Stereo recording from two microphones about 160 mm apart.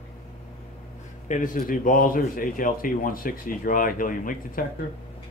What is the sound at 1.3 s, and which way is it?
Speech, 55° left (ahead or behind).